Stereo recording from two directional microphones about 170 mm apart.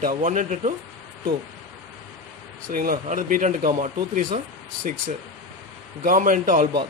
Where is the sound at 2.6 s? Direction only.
55° right (ahead or behind).